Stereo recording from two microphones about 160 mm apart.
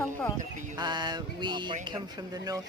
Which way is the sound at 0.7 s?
25° right (ahead or behind).